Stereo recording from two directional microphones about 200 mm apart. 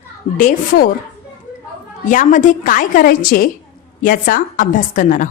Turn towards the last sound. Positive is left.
turn(degrees=40)  # may be behind; listen again after turning